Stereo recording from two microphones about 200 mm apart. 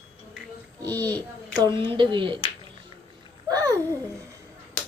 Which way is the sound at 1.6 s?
25° right (ahead or behind).